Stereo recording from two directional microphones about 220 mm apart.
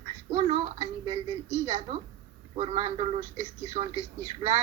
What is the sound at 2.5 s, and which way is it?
Speech, 25° right (ahead or behind).